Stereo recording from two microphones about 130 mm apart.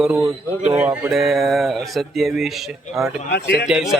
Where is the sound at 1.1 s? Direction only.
Centre (ahead or behind).